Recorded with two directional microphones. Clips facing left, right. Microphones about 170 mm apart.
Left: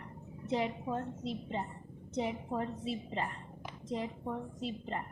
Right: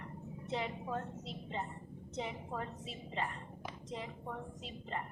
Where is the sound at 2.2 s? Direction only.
35° left (ahead or behind).